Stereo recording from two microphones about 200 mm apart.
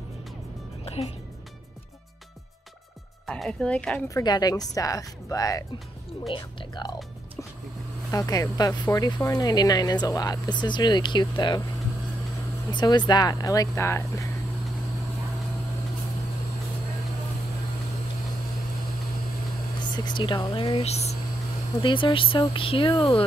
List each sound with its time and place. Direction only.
0.8 s speech: 30° left (ahead or behind)
3.3 s speech: 5° left (ahead or behind)
4.1 s speech: 20° left (ahead or behind)
8.1 s speech: 15° left (ahead or behind)
12.7 s speech: 20° left (ahead or behind)
19.8 s speech: 20° left (ahead or behind)